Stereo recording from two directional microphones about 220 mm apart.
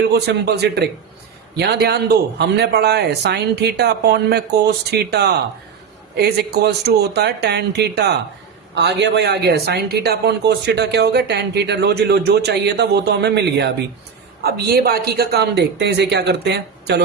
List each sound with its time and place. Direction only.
0.0 s speech: 45° right (ahead or behind)